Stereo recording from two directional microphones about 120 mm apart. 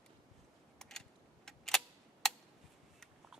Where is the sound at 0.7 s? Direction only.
5° left (ahead or behind).